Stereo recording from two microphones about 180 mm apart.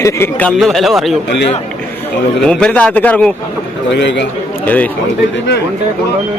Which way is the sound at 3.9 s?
75° left (ahead or behind).